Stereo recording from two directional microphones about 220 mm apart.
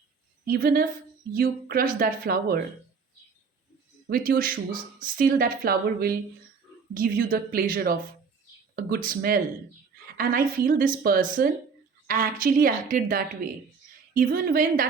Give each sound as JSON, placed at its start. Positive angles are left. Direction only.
{"t": 0.4, "sound": "a woman's voice", "side_deg": -40}
{"t": 4.1, "sound": "a woman's voice", "side_deg": -40}